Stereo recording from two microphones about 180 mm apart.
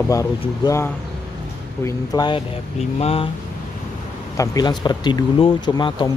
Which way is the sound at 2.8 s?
35° left (ahead or behind).